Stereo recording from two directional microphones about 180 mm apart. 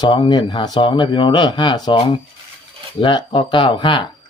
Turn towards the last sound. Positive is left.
turn(degrees=25)  # may be behind; listen again after turning